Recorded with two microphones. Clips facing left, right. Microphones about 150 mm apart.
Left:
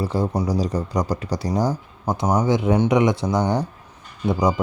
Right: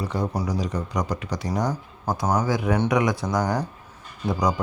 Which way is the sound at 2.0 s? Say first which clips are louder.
Left 3 dB; 20° left (ahead or behind).